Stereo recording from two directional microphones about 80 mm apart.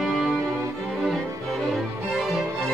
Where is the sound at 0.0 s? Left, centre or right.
Centre.